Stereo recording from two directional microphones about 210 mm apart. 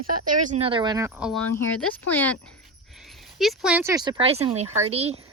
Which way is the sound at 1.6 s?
10° left (ahead or behind).